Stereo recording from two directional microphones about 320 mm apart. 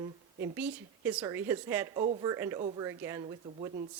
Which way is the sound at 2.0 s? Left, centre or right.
Right.